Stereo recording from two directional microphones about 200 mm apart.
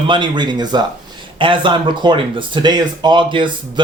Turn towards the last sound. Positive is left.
turn(degrees=-25)  # may be behind; listen again after turning